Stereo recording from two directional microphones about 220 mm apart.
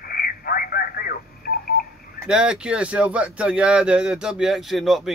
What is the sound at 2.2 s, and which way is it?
Speech, 5° right (ahead or behind).